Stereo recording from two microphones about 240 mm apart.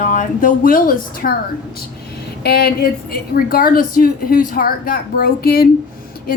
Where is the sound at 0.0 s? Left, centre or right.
Left.